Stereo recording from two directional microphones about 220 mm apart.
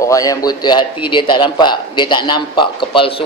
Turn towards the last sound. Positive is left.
turn(degrees=20)  # may be behind; listen again after turning